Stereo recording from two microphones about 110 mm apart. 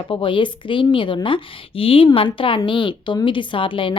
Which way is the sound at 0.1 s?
50° left (ahead or behind).